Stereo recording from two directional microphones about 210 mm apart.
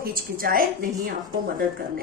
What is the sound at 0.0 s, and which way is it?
Speech, 45° right (ahead or behind).